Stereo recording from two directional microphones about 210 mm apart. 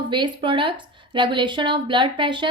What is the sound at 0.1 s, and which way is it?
A woman's voice, 25° right (ahead or behind).